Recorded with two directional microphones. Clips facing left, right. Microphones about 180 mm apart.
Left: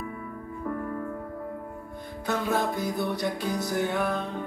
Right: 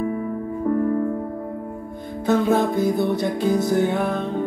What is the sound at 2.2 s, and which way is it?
Music, 25° right (ahead or behind).